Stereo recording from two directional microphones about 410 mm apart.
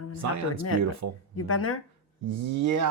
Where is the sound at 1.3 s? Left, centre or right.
Left.